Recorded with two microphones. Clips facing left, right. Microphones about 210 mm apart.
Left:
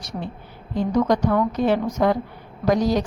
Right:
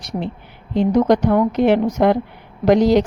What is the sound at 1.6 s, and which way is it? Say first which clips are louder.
A woman's voice: right 5 dB; 70° right (ahead or behind).